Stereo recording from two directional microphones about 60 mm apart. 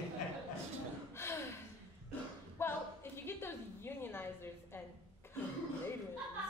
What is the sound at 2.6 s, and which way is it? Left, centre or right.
A woman's voice, left.